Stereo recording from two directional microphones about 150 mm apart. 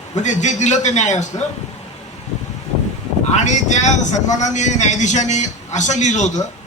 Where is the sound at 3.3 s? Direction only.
50° left (ahead or behind).